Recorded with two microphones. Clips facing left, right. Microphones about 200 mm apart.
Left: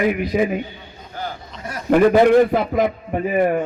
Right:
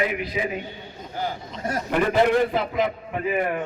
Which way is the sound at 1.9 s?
50° left (ahead or behind).